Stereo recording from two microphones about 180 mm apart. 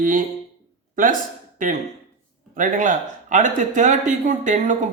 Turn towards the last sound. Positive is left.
turn(degrees=-45)  # may be behind; listen again after turning